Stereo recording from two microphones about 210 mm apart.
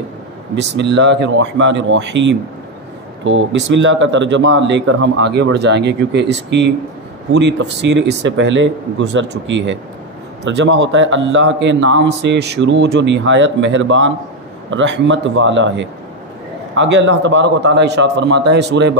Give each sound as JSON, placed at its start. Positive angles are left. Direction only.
{"t": 0.6, "sound": "a man's voice", "side_deg": -55}